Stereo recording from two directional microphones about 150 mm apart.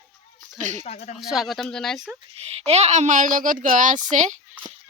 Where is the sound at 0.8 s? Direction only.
45° left (ahead or behind).